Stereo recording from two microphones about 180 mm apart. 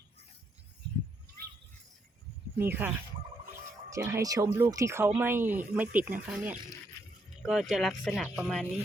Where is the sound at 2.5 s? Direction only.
10° right (ahead or behind).